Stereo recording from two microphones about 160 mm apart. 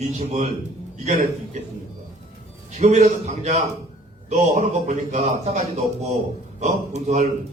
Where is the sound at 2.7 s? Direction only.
45° right (ahead or behind).